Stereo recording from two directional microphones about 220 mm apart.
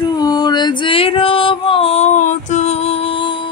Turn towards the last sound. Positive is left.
turn(degrees=25)  # may be behind; listen again after turning